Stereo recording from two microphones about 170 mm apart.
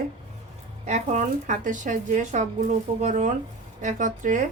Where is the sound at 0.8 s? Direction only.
45° right (ahead or behind).